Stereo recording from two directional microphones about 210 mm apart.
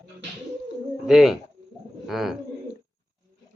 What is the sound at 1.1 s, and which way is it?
Speech, centre (ahead or behind).